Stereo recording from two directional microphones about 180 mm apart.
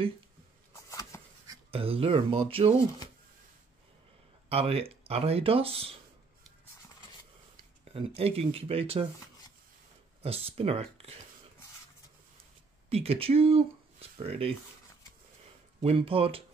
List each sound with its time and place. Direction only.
0.8 s a sound: 15° left (ahead or behind)
1.7 s speech: 30° right (ahead or behind)
4.5 s speech: 35° right (ahead or behind)
8.2 s speech: 35° right (ahead or behind)
10.2 s speech: 35° right (ahead or behind)
12.9 s speech: 35° right (ahead or behind)
15.8 s speech: 30° right (ahead or behind)